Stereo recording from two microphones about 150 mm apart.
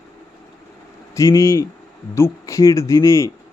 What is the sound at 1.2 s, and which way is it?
Speech, 20° left (ahead or behind).